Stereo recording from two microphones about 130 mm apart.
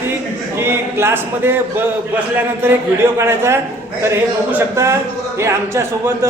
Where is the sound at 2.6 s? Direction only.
20° right (ahead or behind).